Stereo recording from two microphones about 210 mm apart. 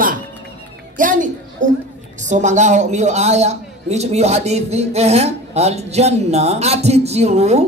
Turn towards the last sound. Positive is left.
turn(degrees=-30)  # may be behind; listen again after turning